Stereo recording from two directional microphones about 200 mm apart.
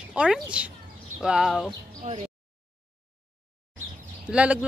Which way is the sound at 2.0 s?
30° right (ahead or behind).